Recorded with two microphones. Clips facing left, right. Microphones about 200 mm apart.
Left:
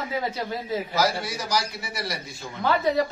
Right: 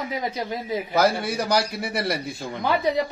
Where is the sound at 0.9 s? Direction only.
55° right (ahead or behind).